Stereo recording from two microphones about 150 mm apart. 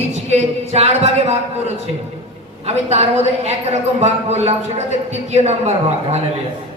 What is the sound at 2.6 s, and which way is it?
A woman's voice, 45° right (ahead or behind).